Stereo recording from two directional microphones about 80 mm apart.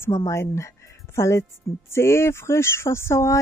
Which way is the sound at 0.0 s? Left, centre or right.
Left.